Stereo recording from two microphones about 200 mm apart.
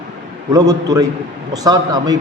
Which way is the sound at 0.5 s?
20° right (ahead or behind).